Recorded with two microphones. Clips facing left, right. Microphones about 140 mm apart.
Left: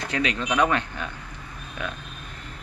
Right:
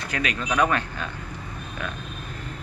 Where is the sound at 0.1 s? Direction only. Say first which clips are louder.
Left 1 dB; 25° left (ahead or behind).